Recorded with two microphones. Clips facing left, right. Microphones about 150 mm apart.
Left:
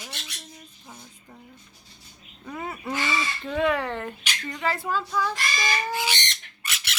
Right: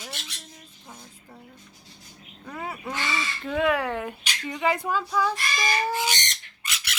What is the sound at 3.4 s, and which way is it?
Speech, 5° right (ahead or behind).